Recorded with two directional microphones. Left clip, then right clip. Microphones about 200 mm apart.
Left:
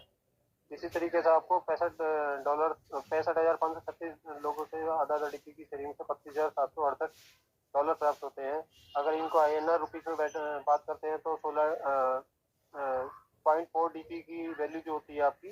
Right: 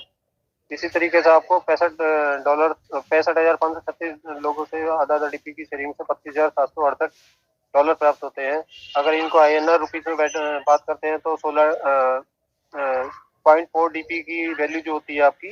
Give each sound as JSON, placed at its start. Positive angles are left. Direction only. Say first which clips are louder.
{"t": 0.9, "sound": "a man's voice", "louder": "right 12 dB", "side_deg": -50}
{"t": 8.4, "sound": "a man's voice", "louder": "right 12 dB", "side_deg": -50}
{"t": 13.9, "sound": "speech", "louder": "right 16 dB", "side_deg": -20}
{"t": 14.4, "sound": "a man's voice", "louder": "right 10 dB", "side_deg": -45}